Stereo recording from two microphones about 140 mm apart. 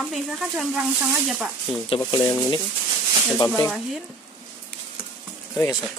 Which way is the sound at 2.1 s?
20° left (ahead or behind).